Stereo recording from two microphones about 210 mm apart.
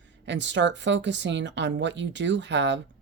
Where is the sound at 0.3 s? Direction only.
60° right (ahead or behind).